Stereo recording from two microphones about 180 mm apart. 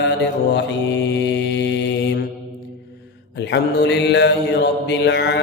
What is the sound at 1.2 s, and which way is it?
Mantra, 75° left (ahead or behind).